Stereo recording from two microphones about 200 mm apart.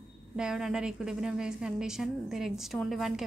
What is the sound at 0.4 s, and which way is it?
A woman's voice, centre (ahead or behind).